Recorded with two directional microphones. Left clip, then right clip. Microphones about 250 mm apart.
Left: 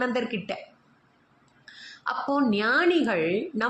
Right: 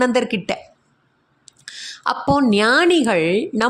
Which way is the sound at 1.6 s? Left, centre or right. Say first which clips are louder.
Right 9 dB; right.